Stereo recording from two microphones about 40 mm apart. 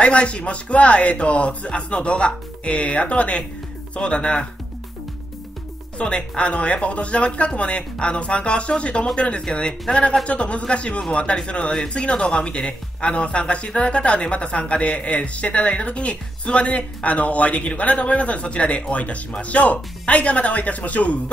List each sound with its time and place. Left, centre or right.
0.0 s speech: left
5.9 s a man's voice: left